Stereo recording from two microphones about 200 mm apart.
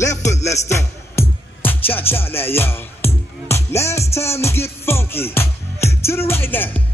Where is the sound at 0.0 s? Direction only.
35° left (ahead or behind).